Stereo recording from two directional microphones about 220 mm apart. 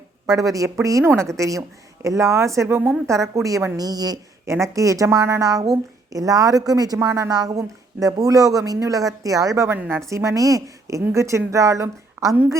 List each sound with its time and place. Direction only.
0.3 s a woman's voice: 15° right (ahead or behind)